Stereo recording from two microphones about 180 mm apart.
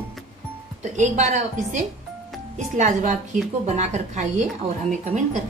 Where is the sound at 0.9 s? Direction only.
40° right (ahead or behind).